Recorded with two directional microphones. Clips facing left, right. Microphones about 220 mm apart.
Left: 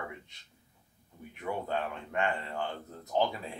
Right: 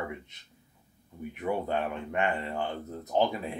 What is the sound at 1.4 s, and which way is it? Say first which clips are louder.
Speech: right 4 dB; 20° right (ahead or behind).